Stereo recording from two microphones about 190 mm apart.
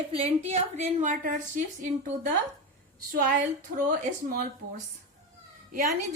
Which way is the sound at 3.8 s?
50° right (ahead or behind).